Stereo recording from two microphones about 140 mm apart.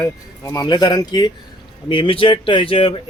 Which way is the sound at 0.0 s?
25° left (ahead or behind).